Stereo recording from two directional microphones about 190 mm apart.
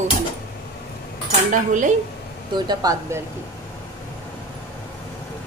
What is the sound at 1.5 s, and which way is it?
Speech, 40° right (ahead or behind).